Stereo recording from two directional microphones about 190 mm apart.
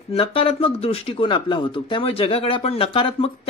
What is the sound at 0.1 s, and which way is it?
Speech, 30° left (ahead or behind).